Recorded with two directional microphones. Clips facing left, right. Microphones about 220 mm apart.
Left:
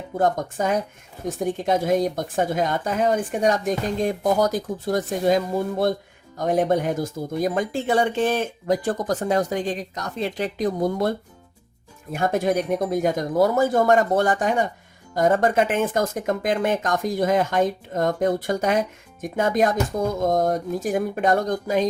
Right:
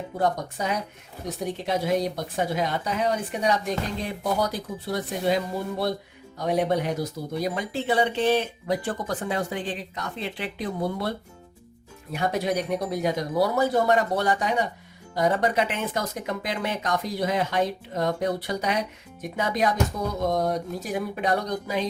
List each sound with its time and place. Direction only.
0.2 s speech: 50° left (ahead or behind)
12.1 s speech: 50° left (ahead or behind)